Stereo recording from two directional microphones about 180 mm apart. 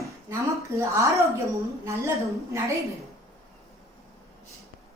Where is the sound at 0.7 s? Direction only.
15° right (ahead or behind).